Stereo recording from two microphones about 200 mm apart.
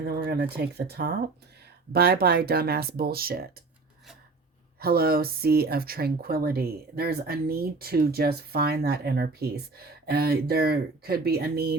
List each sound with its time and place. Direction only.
0.0 s speech: 50° right (ahead or behind)
4.8 s speech: 50° right (ahead or behind)